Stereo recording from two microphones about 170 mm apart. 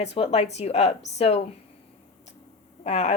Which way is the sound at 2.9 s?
40° left (ahead or behind).